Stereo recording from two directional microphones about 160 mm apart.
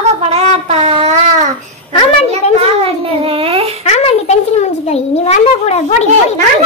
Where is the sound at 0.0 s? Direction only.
40° right (ahead or behind).